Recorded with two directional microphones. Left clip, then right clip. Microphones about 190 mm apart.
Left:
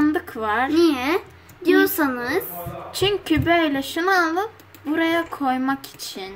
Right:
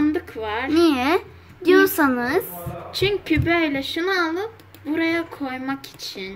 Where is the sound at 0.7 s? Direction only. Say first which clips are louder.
Right 5 dB; 20° right (ahead or behind).